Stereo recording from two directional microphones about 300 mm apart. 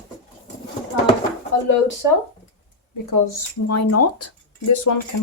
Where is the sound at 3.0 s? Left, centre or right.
Left.